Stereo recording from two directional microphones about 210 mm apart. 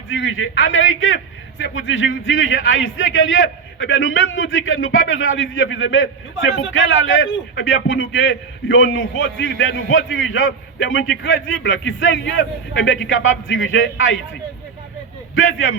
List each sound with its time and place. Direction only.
0.1 s a man's voice: 65° left (ahead or behind)
15.4 s a man's voice: 70° left (ahead or behind)